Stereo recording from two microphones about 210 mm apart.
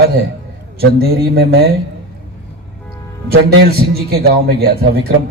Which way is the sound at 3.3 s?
50° right (ahead or behind).